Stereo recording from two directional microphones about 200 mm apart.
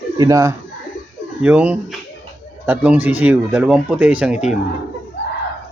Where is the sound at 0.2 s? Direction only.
15° right (ahead or behind).